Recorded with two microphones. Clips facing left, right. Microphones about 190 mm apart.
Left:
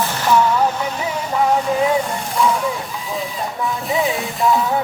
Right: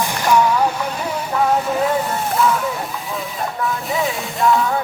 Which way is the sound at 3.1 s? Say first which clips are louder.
Left 3 dB; centre (ahead or behind).